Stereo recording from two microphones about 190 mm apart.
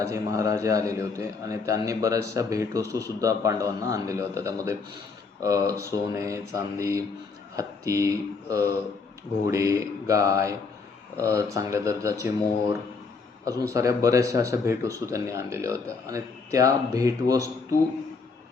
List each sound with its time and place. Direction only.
0.0 s a man's voice: 15° right (ahead or behind)
13.4 s a man's voice: 15° right (ahead or behind)